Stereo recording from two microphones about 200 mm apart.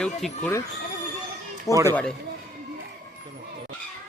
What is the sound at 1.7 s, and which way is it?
Speech, 15° right (ahead or behind).